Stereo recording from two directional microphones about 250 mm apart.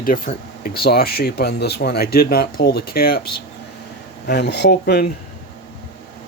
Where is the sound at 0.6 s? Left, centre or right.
Left.